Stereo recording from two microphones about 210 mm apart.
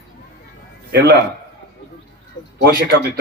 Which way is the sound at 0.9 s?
55° right (ahead or behind).